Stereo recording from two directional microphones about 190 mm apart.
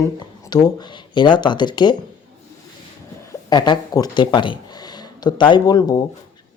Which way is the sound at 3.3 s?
20° left (ahead or behind).